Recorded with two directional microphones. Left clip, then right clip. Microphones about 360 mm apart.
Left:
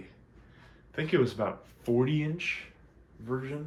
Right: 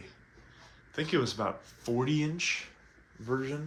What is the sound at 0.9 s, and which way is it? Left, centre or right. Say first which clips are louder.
Speech: left 3 dB; centre.